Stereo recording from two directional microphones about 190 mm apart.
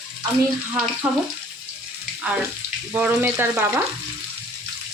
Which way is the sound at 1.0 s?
5° right (ahead or behind).